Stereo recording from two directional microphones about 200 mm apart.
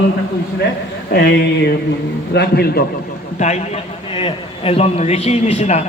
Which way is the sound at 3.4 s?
35° left (ahead or behind).